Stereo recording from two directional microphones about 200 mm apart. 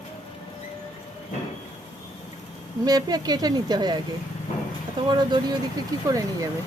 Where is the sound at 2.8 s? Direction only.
20° right (ahead or behind).